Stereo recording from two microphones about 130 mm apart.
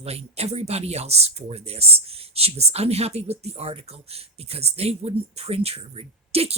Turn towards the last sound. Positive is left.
turn(degrees=-50)  # may be behind; listen again after turning